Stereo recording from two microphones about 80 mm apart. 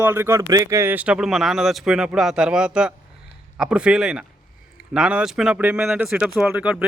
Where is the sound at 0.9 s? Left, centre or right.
Centre.